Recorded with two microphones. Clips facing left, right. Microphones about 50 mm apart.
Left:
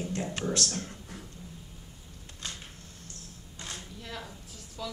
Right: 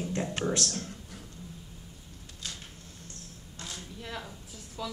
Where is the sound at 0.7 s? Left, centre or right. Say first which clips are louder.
Left 1 dB; centre.